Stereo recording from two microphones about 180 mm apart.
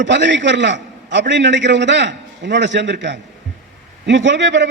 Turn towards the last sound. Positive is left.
turn(degrees=-80)